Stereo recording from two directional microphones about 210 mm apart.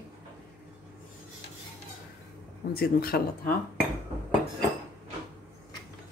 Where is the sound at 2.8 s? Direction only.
45° left (ahead or behind).